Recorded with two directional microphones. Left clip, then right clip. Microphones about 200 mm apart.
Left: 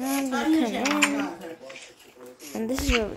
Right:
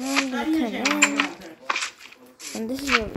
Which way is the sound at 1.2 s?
50° right (ahead or behind).